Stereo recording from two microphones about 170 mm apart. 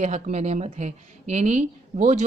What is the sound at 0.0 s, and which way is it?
A woman's voice, 45° right (ahead or behind).